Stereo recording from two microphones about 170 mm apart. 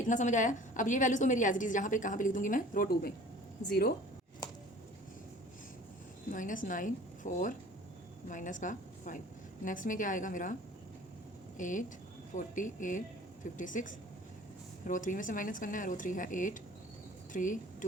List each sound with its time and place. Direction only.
0.0 s a woman's voice: 45° left (ahead or behind)
6.3 s a woman's voice: 50° left (ahead or behind)
11.5 s a woman's voice: 50° left (ahead or behind)